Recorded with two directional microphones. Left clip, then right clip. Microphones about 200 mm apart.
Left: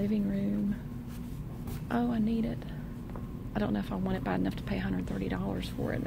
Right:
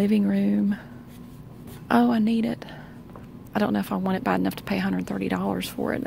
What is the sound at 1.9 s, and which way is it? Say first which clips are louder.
Speech: right 10 dB; 45° right (ahead or behind).